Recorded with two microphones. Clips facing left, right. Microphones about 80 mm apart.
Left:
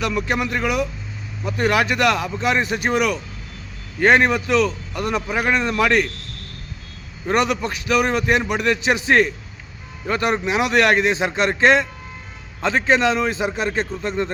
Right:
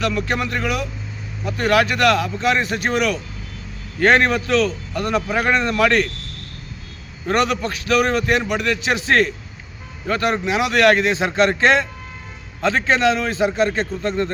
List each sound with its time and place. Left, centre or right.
0.0 s a man's voice: centre
7.3 s a man's voice: centre